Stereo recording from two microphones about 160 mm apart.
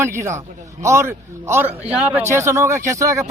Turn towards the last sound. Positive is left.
turn(degrees=-20)  # may be behind; listen again after turning